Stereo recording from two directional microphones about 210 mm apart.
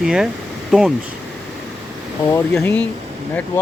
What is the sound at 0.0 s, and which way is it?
Speech, 5° right (ahead or behind).